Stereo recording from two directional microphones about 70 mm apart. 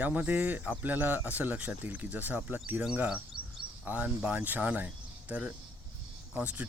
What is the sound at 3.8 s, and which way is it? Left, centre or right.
Speech, right.